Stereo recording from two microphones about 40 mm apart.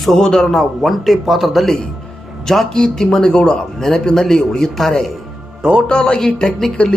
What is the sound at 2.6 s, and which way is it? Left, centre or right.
A man's voice, centre.